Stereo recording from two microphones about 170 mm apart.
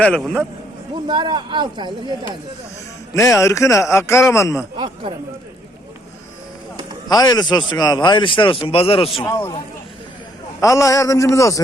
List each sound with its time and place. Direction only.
0.0 s speech: 5° left (ahead or behind)
1.0 s speech: 25° right (ahead or behind)
3.2 s a man's voice: 15° left (ahead or behind)
7.1 s a man's voice: 25° left (ahead or behind)
9.2 s a man's voice: 10° left (ahead or behind)
10.6 s a man's voice: 20° left (ahead or behind)